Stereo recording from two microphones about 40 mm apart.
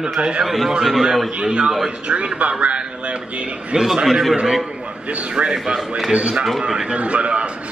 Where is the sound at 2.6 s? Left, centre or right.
Right.